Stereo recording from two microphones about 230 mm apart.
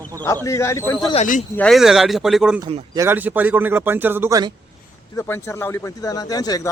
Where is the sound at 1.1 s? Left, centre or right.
Left.